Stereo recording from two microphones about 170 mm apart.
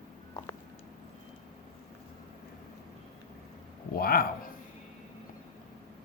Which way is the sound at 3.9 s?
60° left (ahead or behind).